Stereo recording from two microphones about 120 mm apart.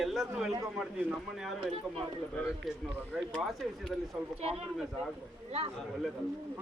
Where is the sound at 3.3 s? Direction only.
5° left (ahead or behind).